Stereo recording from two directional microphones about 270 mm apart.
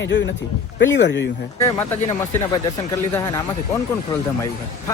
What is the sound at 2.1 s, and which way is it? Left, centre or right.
Speech, centre.